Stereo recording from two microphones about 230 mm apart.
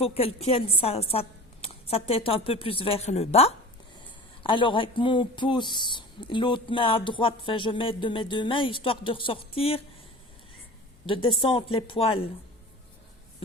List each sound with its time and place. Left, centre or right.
0.0 s speech: left
11.0 s speech: left